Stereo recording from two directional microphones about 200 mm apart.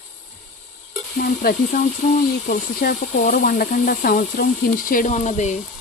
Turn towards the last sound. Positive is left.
turn(degrees=35)  # may be behind; listen again after turning